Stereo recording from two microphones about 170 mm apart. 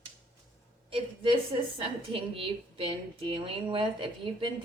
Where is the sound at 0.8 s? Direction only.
30° right (ahead or behind).